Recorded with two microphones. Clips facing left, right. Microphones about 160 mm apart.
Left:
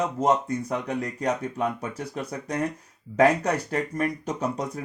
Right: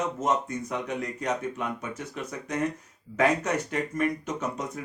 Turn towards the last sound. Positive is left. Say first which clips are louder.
# left 1 dB
turn(degrees=35)  # may be behind; listen again after turning